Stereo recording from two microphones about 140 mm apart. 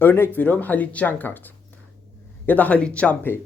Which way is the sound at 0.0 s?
15° left (ahead or behind).